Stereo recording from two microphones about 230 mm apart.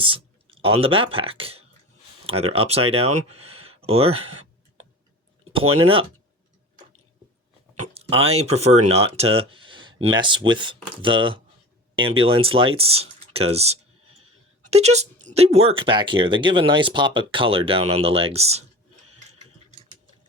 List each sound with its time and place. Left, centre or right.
0.0 s speech: right
5.8 s speech: right
7.8 s speech: right